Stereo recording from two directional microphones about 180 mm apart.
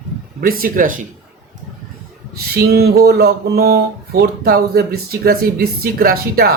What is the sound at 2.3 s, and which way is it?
Speech, 60° right (ahead or behind).